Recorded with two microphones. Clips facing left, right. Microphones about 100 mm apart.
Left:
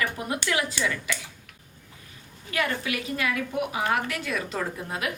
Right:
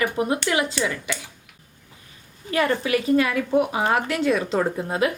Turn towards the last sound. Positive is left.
turn(degrees=-30)  # may be behind; listen again after turning